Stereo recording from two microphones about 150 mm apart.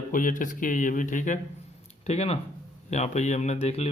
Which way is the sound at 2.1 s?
45° left (ahead or behind).